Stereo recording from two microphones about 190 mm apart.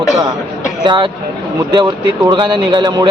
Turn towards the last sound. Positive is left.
turn(degrees=-20)  # may be behind; listen again after turning